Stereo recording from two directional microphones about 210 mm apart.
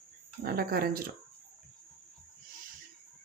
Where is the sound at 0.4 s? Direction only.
45° right (ahead or behind).